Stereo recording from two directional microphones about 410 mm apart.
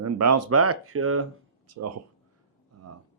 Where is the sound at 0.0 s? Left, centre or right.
Right.